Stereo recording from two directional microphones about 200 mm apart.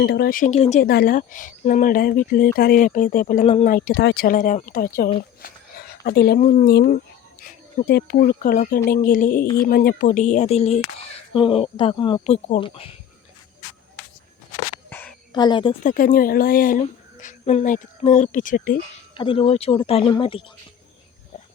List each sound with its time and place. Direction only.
0.0 s speech: 55° left (ahead or behind); by 0.9 s 35° left (ahead or behind)
0.9 s speech: 50° left (ahead or behind); by 13.0 s 30° left (ahead or behind)
14.8 s whispering: 10° left (ahead or behind)
15.3 s a woman's voice: 20° left (ahead or behind)
15.8 s speech: 45° left (ahead or behind)
19.1 s speech: 25° left (ahead or behind)